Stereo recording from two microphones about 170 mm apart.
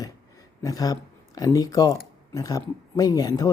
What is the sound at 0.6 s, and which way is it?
Speech, 20° left (ahead or behind).